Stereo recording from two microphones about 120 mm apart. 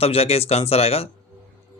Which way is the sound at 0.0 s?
55° left (ahead or behind).